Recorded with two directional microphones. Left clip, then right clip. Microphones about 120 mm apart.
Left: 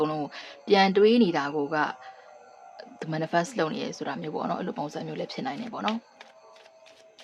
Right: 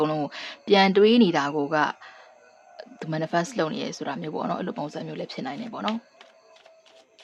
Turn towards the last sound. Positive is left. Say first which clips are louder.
# even
turn(degrees=-5)  # may be behind; listen again after turning